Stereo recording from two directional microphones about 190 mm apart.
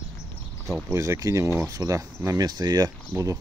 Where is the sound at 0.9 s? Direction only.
15° right (ahead or behind).